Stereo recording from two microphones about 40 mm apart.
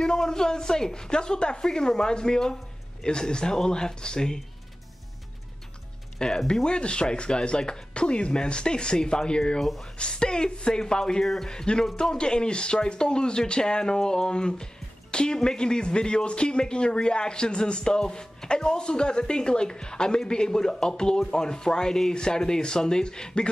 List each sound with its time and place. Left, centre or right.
0.0 s speech: centre
6.1 s speech: centre
9.6 s speech: centre
9.9 s speech: left
11.2 s speech: centre
11.5 s speech: left